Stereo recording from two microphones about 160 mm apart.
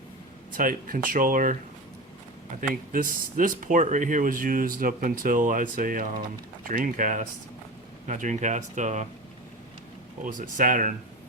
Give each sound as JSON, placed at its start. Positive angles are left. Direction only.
{"t": 0.5, "sound": "speech", "side_deg": -60}
{"t": 2.6, "sound": "speech", "side_deg": -60}
{"t": 10.2, "sound": "speech", "side_deg": -55}